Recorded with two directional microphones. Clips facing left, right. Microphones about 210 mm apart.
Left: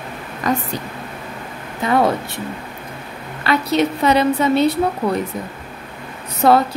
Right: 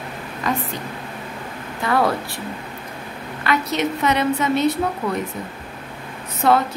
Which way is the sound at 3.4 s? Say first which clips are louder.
Left 4 dB; 30° left (ahead or behind).